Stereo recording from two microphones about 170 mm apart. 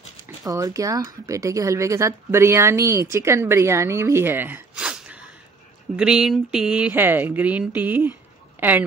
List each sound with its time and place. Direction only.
0.5 s speech: 20° right (ahead or behind)